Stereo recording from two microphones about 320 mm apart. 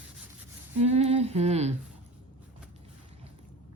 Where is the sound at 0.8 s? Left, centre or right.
Centre.